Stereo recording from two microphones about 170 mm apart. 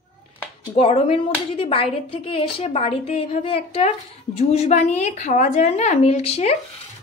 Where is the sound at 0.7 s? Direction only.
35° left (ahead or behind).